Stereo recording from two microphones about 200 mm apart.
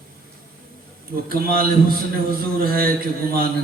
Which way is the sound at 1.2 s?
50° right (ahead or behind).